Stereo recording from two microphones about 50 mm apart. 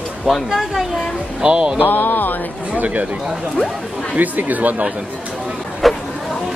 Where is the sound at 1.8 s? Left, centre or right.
Left.